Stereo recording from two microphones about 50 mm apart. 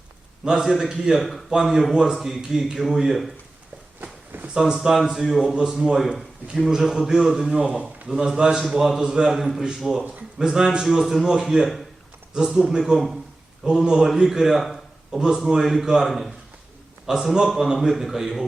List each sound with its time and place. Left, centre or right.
0.4 s a man's voice: centre
4.5 s a man's voice: centre
7.6 s speech: right
8.0 s a man's voice: centre
12.5 s a man's voice: centre
12.8 s a man's voice: centre
13.7 s a man's voice: centre
14.3 s a sound: centre
15.4 s a man's voice: centre
17.1 s a man's voice: centre